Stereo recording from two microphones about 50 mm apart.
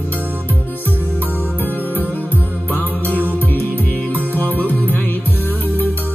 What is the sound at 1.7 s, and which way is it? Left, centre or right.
Music, left.